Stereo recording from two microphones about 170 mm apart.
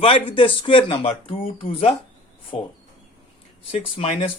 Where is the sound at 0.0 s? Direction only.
30° left (ahead or behind).